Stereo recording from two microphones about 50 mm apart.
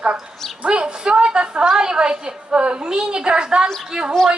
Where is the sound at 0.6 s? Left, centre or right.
Centre.